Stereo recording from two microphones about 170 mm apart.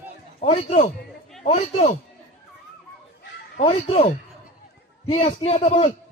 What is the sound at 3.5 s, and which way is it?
Speech, 35° left (ahead or behind).